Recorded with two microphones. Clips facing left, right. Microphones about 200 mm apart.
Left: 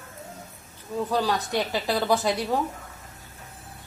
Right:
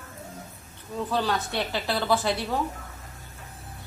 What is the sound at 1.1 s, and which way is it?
Speech, 15° left (ahead or behind).